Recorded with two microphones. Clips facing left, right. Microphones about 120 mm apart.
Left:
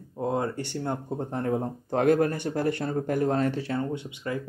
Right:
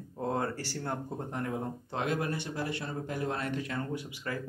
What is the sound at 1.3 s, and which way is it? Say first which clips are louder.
Speech: left 7 dB; 35° left (ahead or behind).